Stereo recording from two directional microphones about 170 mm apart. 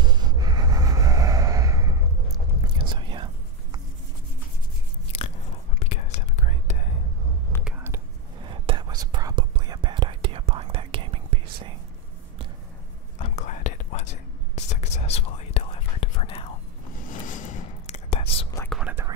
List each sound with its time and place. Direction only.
0.0 s a sound: 25° right (ahead or behind)
2.3 s whispering: 25° right (ahead or behind)
5.8 s whispering: 40° left (ahead or behind)
7.6 s whispering: 10° right (ahead or behind)
8.5 s whispering: 30° right (ahead or behind)
13.2 s whispering: 45° left (ahead or behind)
17.1 s whispering: 50° left (ahead or behind)
18.7 s whispering: 5° right (ahead or behind)